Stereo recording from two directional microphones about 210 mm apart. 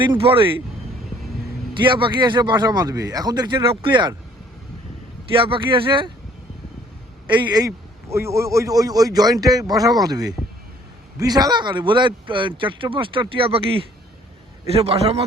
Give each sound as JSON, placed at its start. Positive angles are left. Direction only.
{"t": 0.2, "sound": "speech", "side_deg": -25}
{"t": 1.8, "sound": "speech", "side_deg": -20}
{"t": 5.3, "sound": "speech", "side_deg": -25}
{"t": 8.1, "sound": "speech", "side_deg": -15}